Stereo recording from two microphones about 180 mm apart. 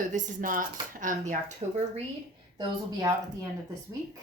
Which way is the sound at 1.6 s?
35° right (ahead or behind).